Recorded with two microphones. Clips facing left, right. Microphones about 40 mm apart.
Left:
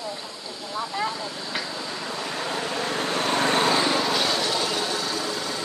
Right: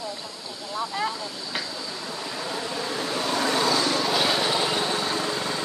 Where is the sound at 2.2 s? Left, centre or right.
Left.